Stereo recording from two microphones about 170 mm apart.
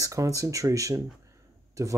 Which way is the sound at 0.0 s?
20° right (ahead or behind).